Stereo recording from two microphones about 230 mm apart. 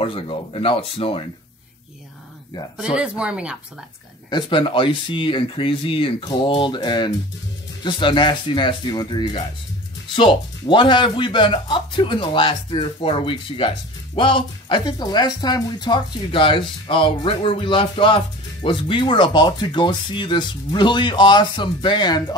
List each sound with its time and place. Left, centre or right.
0.0 s speech: left
2.8 s speech: centre
4.3 s speech: centre